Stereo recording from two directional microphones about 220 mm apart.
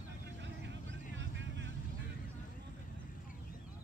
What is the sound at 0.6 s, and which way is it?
Vehicle, 55° right (ahead or behind).